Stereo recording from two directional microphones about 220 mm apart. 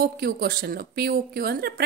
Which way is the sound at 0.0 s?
45° right (ahead or behind).